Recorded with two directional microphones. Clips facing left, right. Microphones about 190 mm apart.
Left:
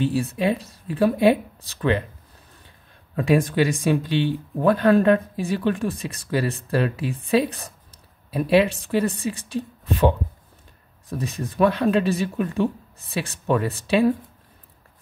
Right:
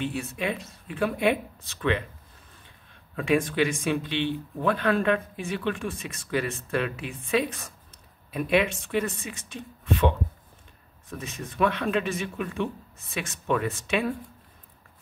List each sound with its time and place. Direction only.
0.0 s speech: 35° left (ahead or behind)
3.2 s speech: 40° left (ahead or behind)